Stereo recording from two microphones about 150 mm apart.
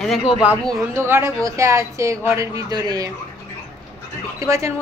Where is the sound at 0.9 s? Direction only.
15° right (ahead or behind).